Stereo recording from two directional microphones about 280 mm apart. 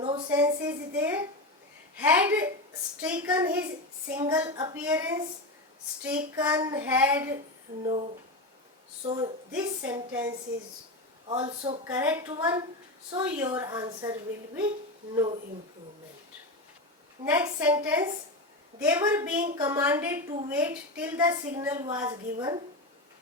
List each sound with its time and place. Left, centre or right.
0.0 s a sound: centre
0.3 s a sound: centre
2.0 s a woman's voice: centre
9.0 s a man's voice: centre
9.5 s a woman's voice: centre
11.3 s a man's voice: centre
11.9 s a woman's voice: centre
17.2 s a woman's voice: centre